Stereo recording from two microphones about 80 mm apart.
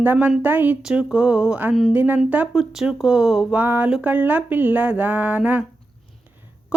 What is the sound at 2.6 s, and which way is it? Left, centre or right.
Speech, centre.